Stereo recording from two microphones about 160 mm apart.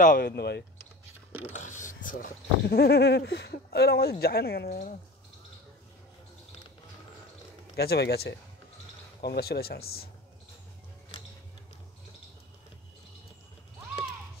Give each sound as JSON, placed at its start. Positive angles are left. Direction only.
{"t": 0.0, "sound": "speech", "side_deg": 60}
{"t": 0.4, "sound": "speech", "side_deg": 90}
{"t": 1.5, "sound": "speech", "side_deg": 50}
{"t": 7.7, "sound": "speech", "side_deg": 80}
{"t": 9.2, "sound": "speech", "side_deg": 80}